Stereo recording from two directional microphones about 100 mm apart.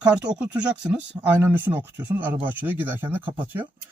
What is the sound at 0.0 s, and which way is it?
Speech, 10° right (ahead or behind).